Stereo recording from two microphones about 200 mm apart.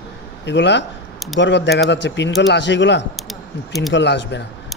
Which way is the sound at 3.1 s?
Centre (ahead or behind).